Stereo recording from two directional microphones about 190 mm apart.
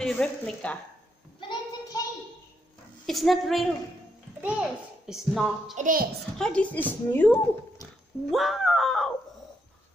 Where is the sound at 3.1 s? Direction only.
Centre (ahead or behind).